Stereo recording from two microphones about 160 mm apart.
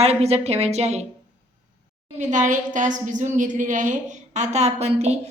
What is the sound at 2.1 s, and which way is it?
A woman's voice, 50° right (ahead or behind).